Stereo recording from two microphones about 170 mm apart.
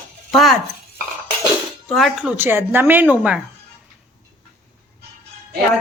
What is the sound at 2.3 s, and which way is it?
A woman's voice, 15° right (ahead or behind).